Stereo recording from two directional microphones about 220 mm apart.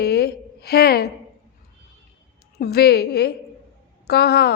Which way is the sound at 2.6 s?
45° left (ahead or behind).